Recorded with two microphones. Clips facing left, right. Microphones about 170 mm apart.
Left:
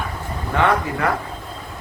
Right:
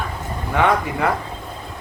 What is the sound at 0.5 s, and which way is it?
Speech, 15° right (ahead or behind).